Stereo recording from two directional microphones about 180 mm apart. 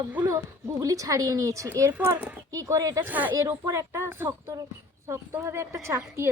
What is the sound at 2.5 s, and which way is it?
A woman's voice, 20° right (ahead or behind).